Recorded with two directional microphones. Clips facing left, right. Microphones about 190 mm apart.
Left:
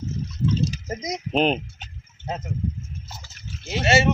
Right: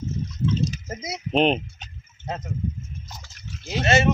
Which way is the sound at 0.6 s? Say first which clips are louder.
Left 1 dB; 10° left (ahead or behind).